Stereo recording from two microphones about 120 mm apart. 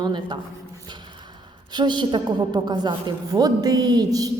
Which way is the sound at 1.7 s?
35° right (ahead or behind).